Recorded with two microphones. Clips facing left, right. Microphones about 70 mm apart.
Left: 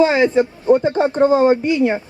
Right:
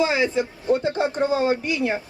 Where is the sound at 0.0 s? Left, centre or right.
Left.